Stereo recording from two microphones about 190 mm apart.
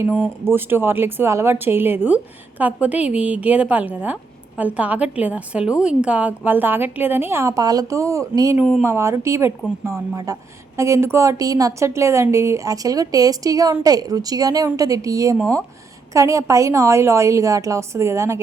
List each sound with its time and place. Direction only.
0.0 s a woman's voice: 10° right (ahead or behind)
8.5 s speech: centre (ahead or behind)
8.8 s a woman's voice: 15° right (ahead or behind)